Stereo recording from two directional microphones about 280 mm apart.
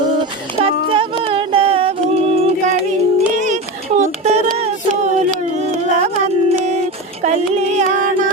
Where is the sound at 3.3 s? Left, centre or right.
Right.